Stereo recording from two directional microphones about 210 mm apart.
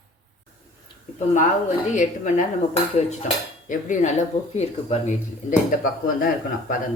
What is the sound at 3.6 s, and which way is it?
A woman's voice, 35° left (ahead or behind).